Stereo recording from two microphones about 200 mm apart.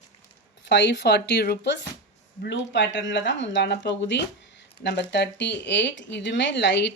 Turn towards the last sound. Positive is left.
turn(degrees=60)  # may be behind; listen again after turning